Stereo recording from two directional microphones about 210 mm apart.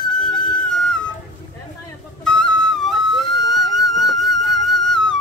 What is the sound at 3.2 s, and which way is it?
Music, 20° left (ahead or behind).